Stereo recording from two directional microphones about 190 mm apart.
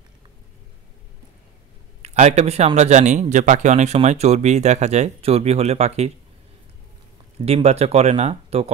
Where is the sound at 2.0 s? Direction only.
35° right (ahead or behind).